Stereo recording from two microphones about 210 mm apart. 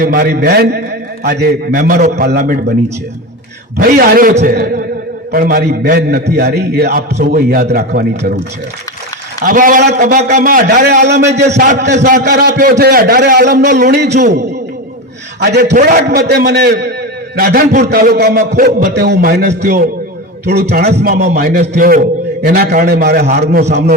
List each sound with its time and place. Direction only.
0.0 s a man's voice: 45° right (ahead or behind)
3.8 s a man's voice: 45° right (ahead or behind)
4.5 s a man's voice: 50° right (ahead or behind)
9.4 s a man's voice: 40° right (ahead or behind)
11.9 s a man's voice: 55° right (ahead or behind)
15.4 s a man's voice: 50° right (ahead or behind)
15.7 s a man's voice: 35° right (ahead or behind)
16.3 s a man's voice: 50° right (ahead or behind)
17.8 s a man's voice: 50° right (ahead or behind)